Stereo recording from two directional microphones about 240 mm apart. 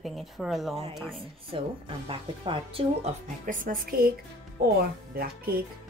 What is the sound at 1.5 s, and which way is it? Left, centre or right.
A woman's voice, right.